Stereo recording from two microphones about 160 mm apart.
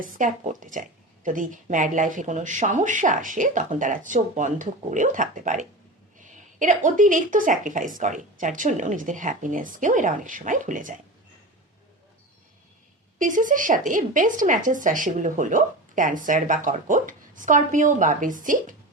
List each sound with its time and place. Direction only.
0.0 s a woman's voice: 55° right (ahead or behind)
13.1 s speech: 55° right (ahead or behind)